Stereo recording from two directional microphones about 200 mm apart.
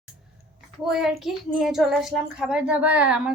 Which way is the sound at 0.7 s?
Centre (ahead or behind).